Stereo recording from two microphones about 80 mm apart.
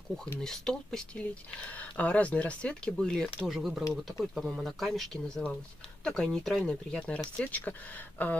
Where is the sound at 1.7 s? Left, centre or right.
Centre.